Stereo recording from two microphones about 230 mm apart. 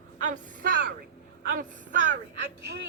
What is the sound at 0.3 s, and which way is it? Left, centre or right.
Speech, right.